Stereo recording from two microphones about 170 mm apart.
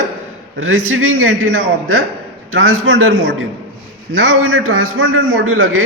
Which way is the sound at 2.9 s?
90° right.